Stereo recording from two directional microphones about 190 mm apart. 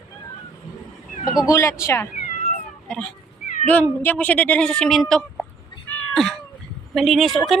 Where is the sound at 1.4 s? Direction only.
15° left (ahead or behind).